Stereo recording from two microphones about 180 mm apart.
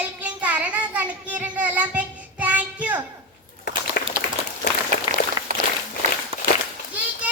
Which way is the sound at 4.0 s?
60° left (ahead or behind).